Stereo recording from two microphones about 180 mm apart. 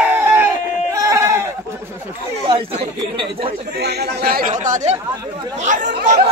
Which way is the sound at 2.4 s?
30° right (ahead or behind).